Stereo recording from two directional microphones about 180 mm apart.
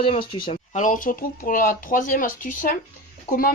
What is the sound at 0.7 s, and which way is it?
Speech, 45° left (ahead or behind).